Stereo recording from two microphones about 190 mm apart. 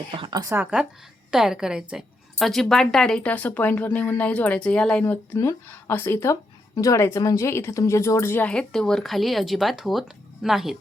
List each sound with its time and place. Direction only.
0.1 s speech: 25° right (ahead or behind)
0.5 s a woman's voice: 5° right (ahead or behind)